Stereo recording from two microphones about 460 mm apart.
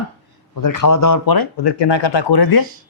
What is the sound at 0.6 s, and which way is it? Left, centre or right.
Speech, left.